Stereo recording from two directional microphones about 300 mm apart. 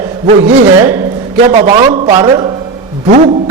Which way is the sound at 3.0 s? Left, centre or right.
Right.